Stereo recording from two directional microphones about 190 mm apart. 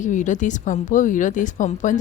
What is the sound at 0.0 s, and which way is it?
Speech, 40° left (ahead or behind).